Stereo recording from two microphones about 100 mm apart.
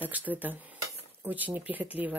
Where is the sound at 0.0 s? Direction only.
15° right (ahead or behind).